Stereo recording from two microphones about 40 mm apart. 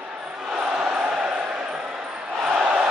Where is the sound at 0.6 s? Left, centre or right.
Right.